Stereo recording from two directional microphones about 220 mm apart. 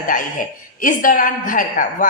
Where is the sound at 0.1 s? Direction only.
40° left (ahead or behind).